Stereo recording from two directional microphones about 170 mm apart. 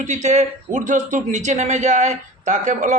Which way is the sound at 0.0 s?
45° right (ahead or behind).